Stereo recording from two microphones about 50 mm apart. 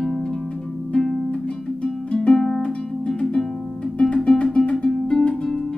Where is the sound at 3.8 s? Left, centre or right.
Left.